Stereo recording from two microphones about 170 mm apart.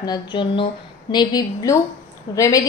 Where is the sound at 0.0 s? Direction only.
25° left (ahead or behind).